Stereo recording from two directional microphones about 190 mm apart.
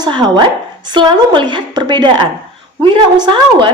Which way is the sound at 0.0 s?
25° right (ahead or behind).